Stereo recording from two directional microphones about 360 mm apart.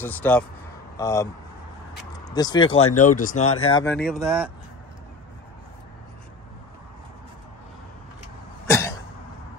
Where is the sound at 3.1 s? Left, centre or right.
Left.